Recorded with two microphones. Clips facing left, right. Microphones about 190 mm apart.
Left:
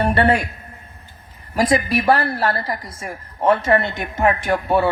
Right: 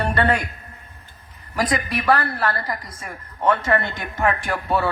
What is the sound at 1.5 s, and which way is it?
A woman's voice, 25° left (ahead or behind).